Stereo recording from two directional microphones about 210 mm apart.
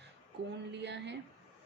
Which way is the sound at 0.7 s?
55° right (ahead or behind).